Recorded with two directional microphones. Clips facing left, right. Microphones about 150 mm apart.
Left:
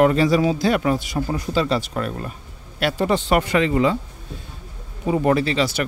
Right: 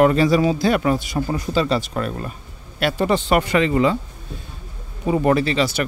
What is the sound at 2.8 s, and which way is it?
Speech, 55° right (ahead or behind).